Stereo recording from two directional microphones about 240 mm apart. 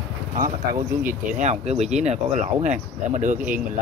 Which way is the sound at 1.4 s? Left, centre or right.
Right.